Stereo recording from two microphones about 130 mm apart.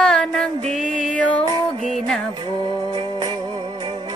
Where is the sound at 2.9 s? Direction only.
35° right (ahead or behind).